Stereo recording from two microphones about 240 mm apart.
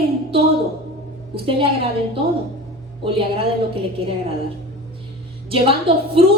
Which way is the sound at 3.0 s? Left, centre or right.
Right.